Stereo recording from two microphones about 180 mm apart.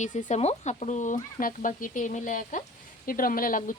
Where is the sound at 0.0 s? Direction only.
45° left (ahead or behind).